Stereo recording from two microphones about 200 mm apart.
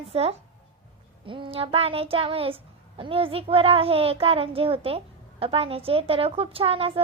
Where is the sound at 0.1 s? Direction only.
30° right (ahead or behind).